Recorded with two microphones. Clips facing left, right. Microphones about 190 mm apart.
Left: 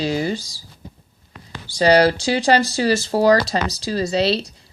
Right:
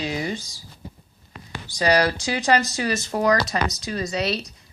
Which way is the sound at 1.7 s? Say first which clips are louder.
Left 6 dB; 30° left (ahead or behind).